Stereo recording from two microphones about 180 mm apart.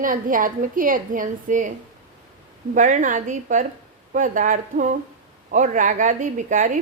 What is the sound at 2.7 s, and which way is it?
A woman's voice, 45° right (ahead or behind).